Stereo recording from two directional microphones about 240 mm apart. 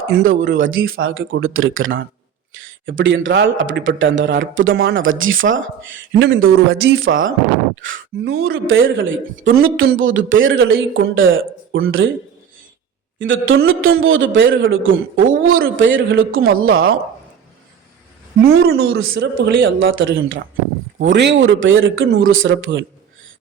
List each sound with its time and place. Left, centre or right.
0.3 s a man's voice: right
8.5 s a man's voice: right
13.1 s speech: right
15.3 s a man's voice: right
15.6 s a man's voice: right
19.1 s speech: right